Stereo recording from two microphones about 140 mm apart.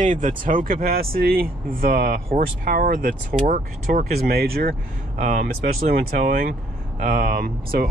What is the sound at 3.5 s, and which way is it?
Speech, 70° right (ahead or behind).